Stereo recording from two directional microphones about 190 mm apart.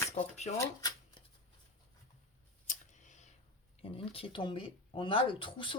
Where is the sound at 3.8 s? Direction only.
30° left (ahead or behind).